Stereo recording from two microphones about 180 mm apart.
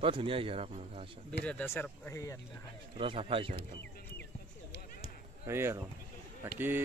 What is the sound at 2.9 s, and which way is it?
Speech, 30° right (ahead or behind).